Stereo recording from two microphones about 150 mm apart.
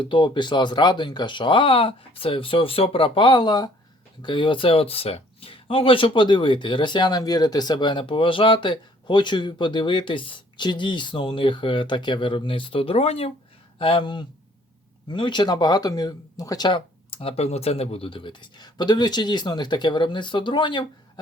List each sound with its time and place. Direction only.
0.0 s speech: 30° left (ahead or behind)